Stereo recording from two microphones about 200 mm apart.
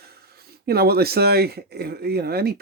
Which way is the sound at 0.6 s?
50° right (ahead or behind).